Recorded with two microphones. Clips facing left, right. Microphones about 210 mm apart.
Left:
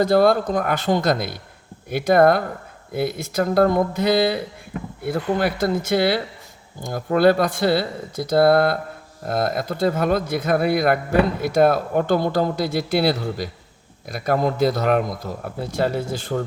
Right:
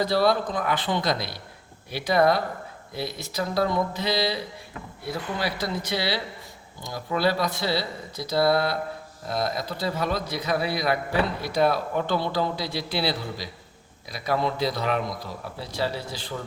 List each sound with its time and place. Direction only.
0.0 s speech: 50° left (ahead or behind)